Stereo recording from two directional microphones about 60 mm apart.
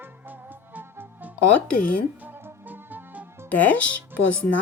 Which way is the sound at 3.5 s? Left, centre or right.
Left.